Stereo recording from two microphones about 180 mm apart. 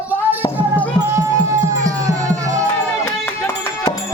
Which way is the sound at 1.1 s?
15° right (ahead or behind).